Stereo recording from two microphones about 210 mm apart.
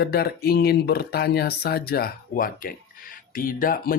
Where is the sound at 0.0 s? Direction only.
50° left (ahead or behind).